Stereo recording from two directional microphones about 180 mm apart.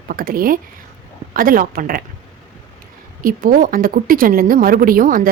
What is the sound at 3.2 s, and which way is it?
A woman's voice, 50° right (ahead or behind).